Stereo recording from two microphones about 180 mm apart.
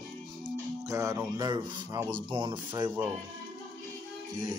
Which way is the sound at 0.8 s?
15° right (ahead or behind).